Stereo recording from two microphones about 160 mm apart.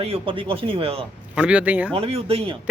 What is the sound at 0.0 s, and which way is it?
Speech, 35° right (ahead or behind).